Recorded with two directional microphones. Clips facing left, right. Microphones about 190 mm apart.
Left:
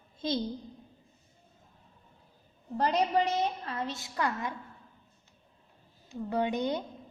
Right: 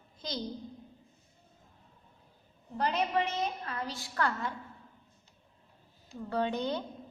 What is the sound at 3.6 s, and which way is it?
Speech, 25° left (ahead or behind).